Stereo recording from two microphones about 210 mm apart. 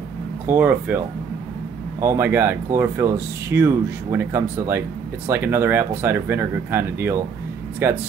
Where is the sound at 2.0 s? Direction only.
10° right (ahead or behind).